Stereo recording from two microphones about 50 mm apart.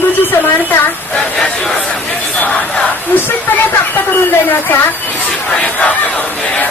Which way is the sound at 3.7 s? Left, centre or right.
Left.